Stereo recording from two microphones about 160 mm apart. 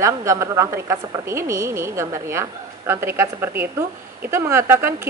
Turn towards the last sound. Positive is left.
turn(degrees=-15)  # may be behind; listen again after turning